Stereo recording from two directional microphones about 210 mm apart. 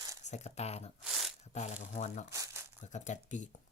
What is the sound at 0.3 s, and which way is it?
Speech, 30° left (ahead or behind).